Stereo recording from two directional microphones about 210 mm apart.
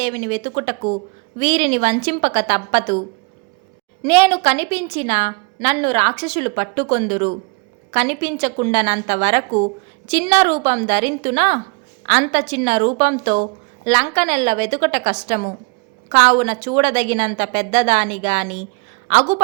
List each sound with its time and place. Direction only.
0.0 s a woman's voice: 35° right (ahead or behind)
4.0 s a woman's voice: 25° right (ahead or behind)